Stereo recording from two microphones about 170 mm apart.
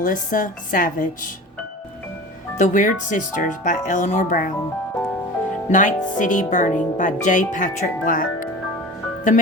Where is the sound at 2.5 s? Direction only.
50° left (ahead or behind).